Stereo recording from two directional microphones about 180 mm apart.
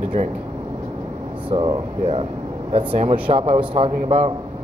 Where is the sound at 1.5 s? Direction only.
25° right (ahead or behind).